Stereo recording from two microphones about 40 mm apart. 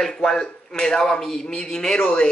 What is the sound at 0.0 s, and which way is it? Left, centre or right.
Speech, centre.